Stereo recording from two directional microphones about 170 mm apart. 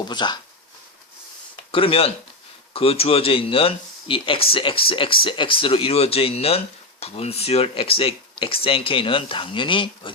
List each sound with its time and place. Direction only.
0.0 s speech: 25° left (ahead or behind)
1.7 s speech: 35° left (ahead or behind)